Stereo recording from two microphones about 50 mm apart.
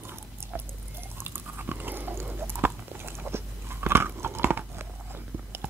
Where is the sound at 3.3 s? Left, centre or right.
Right.